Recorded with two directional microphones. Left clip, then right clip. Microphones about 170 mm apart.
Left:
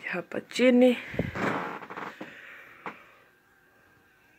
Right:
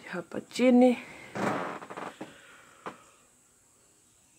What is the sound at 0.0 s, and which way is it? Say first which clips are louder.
Speech: left 4 dB; 15° right (ahead or behind).